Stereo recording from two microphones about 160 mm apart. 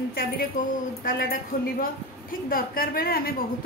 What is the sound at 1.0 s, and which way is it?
A woman's voice, 70° left (ahead or behind).